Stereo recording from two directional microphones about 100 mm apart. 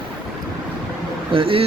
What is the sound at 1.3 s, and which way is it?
Speech, 65° right (ahead or behind).